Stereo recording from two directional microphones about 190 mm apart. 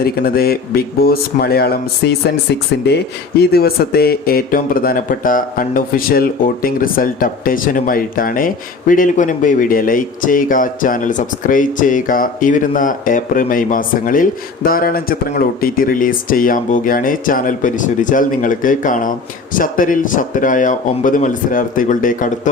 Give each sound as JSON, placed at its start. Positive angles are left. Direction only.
{"t": 0.0, "sound": "speech", "side_deg": 55}